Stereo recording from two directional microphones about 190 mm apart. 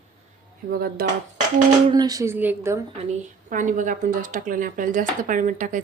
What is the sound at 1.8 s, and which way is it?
Speech, 20° right (ahead or behind).